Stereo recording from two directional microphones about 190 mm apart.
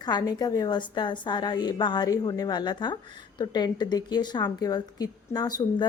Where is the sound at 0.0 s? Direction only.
25° left (ahead or behind).